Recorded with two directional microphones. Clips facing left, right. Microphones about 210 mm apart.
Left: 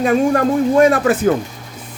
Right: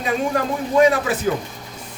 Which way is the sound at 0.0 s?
50° left (ahead or behind).